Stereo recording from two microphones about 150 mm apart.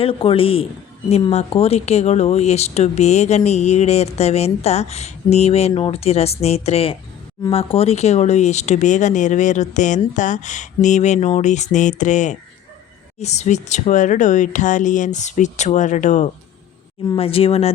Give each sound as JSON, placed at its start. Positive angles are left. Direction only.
{"t": 0.0, "sound": "a woman's voice", "side_deg": 35}
{"t": 17.2, "sound": "speech", "side_deg": 40}